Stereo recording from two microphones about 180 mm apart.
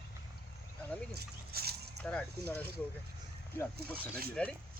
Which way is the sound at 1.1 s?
60° right (ahead or behind).